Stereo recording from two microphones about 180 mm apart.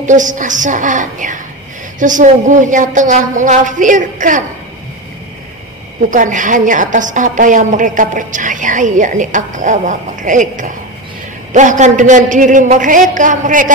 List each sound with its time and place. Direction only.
0.0 s a woman's voice: 45° right (ahead or behind)
6.0 s a woman's voice: 45° right (ahead or behind)